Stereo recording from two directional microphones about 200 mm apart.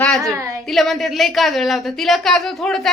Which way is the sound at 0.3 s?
15° right (ahead or behind).